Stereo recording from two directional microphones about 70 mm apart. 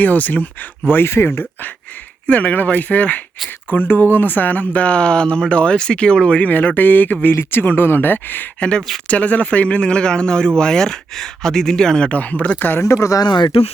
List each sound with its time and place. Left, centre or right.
0.0 s speech: left
2.2 s speech: left
12.8 s speech: left
13.2 s speech: left